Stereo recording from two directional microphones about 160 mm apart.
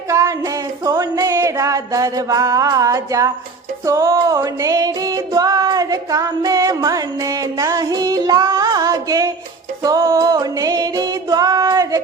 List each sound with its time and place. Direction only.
0.1 s music: 20° right (ahead or behind)